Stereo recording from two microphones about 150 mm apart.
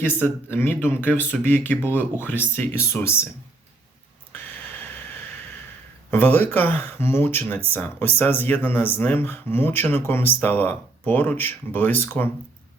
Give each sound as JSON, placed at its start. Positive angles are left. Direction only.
{"t": 0.2, "sound": "speech", "side_deg": 15}
{"t": 4.3, "sound": "a sound", "side_deg": 10}
{"t": 6.1, "sound": "speech", "side_deg": 15}